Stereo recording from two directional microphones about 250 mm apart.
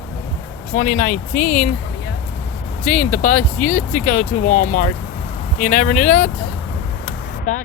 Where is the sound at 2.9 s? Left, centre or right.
Left.